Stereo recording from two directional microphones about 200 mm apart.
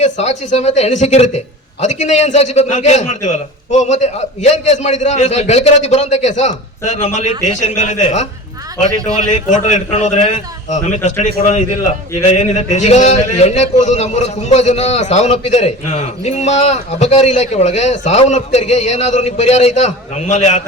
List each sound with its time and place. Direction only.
0.0 s a man's voice: 35° left (ahead or behind)